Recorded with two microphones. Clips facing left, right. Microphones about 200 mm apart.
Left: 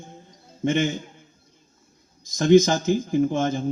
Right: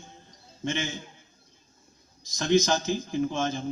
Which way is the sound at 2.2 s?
50° left (ahead or behind).